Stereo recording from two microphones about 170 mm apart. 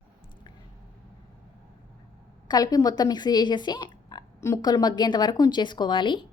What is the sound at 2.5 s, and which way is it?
Speech, 20° left (ahead or behind).